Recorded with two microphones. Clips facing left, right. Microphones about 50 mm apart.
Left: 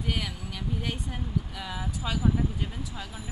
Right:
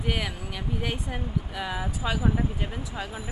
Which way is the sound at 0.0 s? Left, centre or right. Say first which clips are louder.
Right 3 dB; centre.